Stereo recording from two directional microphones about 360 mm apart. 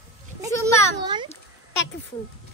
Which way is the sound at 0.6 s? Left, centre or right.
Centre.